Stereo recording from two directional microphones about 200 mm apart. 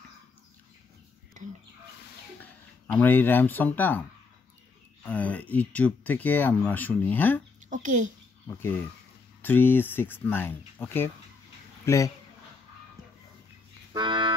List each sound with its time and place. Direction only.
2.9 s speech: 10° left (ahead or behind)
5.1 s speech: 5° left (ahead or behind)
7.7 s a child's voice: 40° right (ahead or behind)
8.5 s speech: 10° left (ahead or behind)
13.9 s music: 20° right (ahead or behind)